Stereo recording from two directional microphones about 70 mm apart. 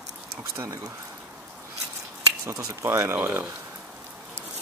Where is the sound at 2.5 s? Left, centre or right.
Right.